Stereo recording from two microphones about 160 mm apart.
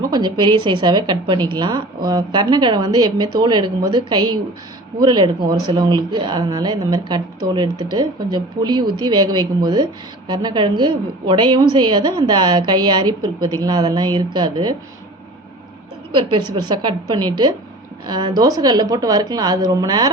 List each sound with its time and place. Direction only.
0.1 s speech: 30° right (ahead or behind)
16.6 s speech: 25° right (ahead or behind)